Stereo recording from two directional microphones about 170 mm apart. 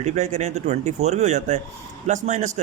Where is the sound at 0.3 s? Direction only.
40° right (ahead or behind).